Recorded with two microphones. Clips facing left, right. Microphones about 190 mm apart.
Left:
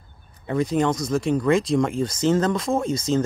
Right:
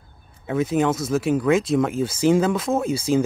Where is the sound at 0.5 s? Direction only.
5° right (ahead or behind).